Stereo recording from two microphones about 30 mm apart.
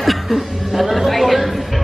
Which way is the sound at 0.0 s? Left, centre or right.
Centre.